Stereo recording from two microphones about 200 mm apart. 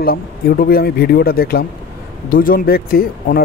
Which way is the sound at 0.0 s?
50° left (ahead or behind).